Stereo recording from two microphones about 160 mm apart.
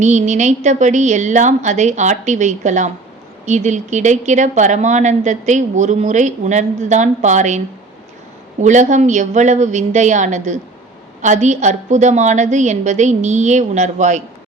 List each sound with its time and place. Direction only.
0.0 s speech: 50° right (ahead or behind)
8.6 s speech: 50° right (ahead or behind)